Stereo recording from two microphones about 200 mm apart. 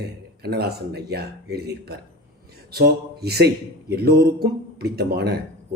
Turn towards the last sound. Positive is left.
turn(degrees=-55)  # may be behind; listen again after turning